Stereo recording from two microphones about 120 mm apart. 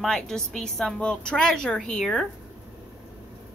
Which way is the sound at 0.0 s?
5° left (ahead or behind).